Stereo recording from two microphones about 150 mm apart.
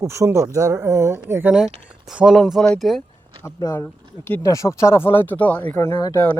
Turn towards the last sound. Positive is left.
turn(degrees=25)  # may be behind; listen again after turning